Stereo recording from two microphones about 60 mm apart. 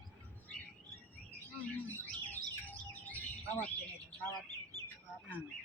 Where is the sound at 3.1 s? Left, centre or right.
Left.